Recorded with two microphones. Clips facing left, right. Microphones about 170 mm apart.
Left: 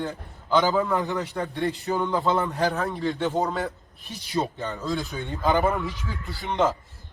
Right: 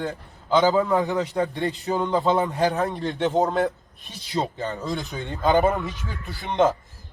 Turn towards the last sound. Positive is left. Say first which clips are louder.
# right 3 dB
turn(degrees=-20)  # may be behind; listen again after turning